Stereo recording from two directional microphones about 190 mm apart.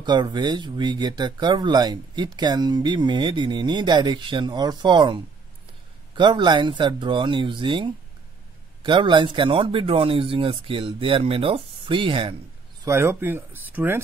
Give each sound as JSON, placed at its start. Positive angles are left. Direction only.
{"t": 0.0, "sound": "speech", "side_deg": -25}
{"t": 12.8, "sound": "speech", "side_deg": -15}